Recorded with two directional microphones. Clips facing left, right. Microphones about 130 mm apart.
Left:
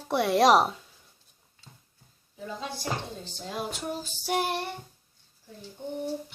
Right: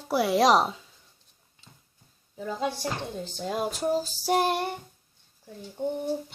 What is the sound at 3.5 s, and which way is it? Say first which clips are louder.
Child singing: right 7 dB; 40° right (ahead or behind).